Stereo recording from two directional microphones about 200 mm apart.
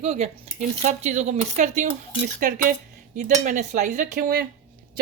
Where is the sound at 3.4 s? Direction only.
35° right (ahead or behind).